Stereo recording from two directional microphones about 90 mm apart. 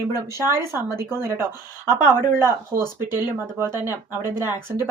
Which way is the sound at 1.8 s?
30° right (ahead or behind).